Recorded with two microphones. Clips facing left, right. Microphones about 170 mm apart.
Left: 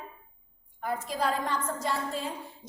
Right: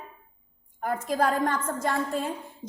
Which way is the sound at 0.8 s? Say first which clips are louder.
Right 4 dB; 50° right (ahead or behind).